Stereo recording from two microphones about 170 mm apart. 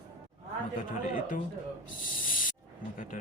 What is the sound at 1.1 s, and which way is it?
Speech, 50° left (ahead or behind).